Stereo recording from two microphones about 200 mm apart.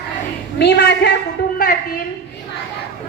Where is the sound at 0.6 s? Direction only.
55° left (ahead or behind).